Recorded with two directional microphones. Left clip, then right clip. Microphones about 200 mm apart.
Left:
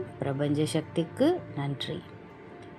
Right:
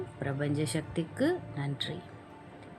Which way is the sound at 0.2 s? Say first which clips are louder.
Left 5 dB; 5° left (ahead or behind).